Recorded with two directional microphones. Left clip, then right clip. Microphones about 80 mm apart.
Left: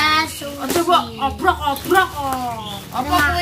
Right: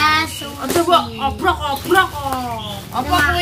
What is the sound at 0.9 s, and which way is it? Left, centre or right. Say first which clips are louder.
Speech: right 1 dB; right.